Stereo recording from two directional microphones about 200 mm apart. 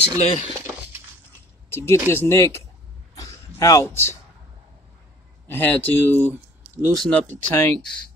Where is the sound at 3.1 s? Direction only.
15° left (ahead or behind).